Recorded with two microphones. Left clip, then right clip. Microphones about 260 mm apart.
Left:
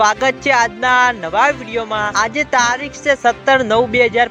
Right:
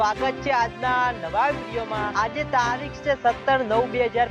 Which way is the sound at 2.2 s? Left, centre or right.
Left.